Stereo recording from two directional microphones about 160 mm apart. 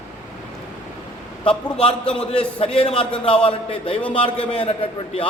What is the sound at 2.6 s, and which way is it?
A man's voice, 40° left (ahead or behind).